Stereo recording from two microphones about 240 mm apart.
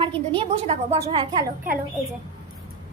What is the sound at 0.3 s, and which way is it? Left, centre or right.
A woman's voice, right.